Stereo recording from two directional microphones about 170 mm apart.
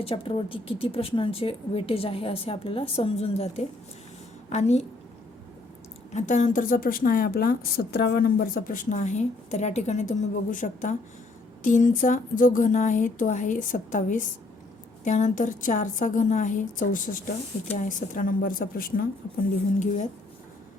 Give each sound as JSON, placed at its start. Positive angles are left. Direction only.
{"t": 0.0, "sound": "a woman's voice", "side_deg": 35}
{"t": 6.1, "sound": "a woman's voice", "side_deg": 45}